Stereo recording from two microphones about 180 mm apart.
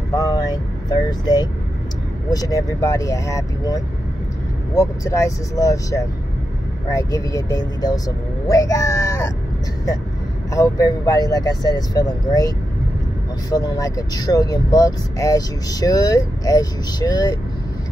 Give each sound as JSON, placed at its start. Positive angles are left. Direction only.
{"t": 0.1, "sound": "vehicle", "side_deg": 20}
{"t": 2.3, "sound": "speech", "side_deg": 20}
{"t": 10.5, "sound": "speech", "side_deg": 20}